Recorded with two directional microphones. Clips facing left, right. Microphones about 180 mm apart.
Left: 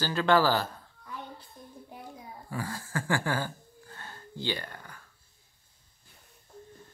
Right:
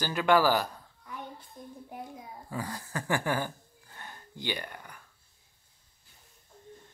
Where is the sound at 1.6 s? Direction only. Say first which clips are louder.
Right 3 dB; 20° right (ahead or behind).